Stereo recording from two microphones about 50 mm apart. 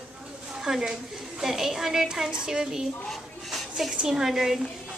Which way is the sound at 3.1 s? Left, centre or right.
Centre.